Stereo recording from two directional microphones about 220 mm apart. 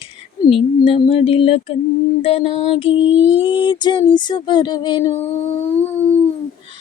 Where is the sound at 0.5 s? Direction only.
25° left (ahead or behind).